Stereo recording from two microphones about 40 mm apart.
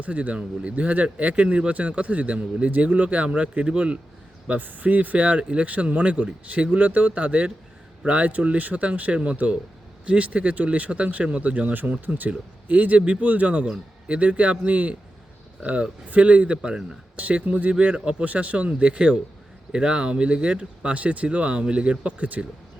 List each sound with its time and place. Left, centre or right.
0.0 s speech: right
4.4 s speech: right
8.3 s speech: right
11.7 s speech: right